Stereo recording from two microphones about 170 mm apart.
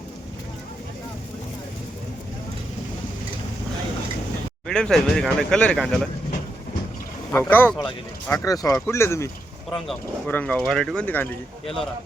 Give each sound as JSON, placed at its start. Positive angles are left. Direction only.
{"t": 4.7, "sound": "speech", "side_deg": 5}
{"t": 7.3, "sound": "speech", "side_deg": 10}